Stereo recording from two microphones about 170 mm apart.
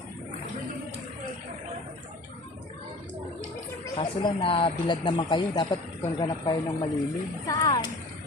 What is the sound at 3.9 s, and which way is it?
Speech, 30° left (ahead or behind).